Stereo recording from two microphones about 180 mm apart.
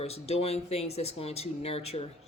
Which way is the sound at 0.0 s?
35° left (ahead or behind).